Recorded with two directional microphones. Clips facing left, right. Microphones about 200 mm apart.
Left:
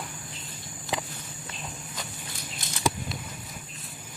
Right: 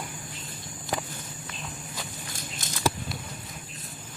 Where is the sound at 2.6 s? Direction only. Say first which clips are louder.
Right 2 dB; 45° right (ahead or behind).